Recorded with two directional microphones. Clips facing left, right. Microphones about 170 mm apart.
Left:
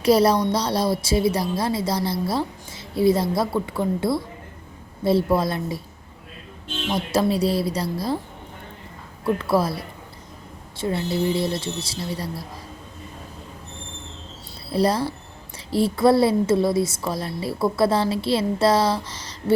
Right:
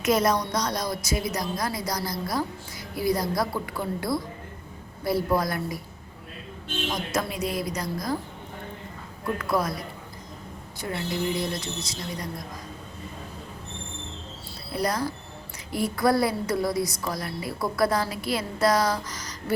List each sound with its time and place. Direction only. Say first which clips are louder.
0.0 s a woman's voice: left 6 dB; 30° left (ahead or behind)
6.9 s a woman's voice: left 10 dB; 30° left (ahead or behind)
9.2 s a woman's voice: left 5 dB; 30° left (ahead or behind)
14.7 s a woman's voice: left 6 dB; 30° left (ahead or behind)